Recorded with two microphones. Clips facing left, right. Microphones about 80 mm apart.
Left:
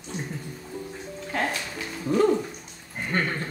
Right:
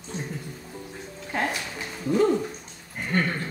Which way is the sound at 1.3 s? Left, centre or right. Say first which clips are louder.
Even; centre.